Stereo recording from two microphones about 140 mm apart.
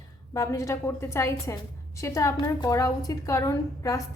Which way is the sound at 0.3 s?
20° left (ahead or behind).